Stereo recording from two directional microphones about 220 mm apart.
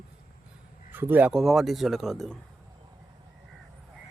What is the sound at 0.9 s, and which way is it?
Speech, 10° right (ahead or behind).